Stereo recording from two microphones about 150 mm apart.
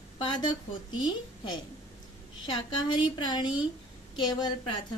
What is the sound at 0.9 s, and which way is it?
A woman's voice, 30° left (ahead or behind).